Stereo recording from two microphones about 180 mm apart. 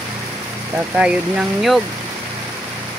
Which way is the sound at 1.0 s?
5° right (ahead or behind).